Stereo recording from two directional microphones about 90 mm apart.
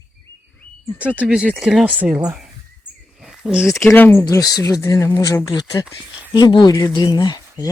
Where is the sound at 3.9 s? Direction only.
25° left (ahead or behind).